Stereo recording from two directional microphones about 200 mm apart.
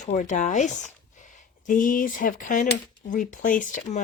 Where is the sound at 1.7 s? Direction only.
40° left (ahead or behind).